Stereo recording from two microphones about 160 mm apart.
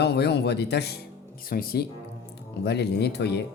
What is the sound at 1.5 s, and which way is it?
Speech, 65° left (ahead or behind).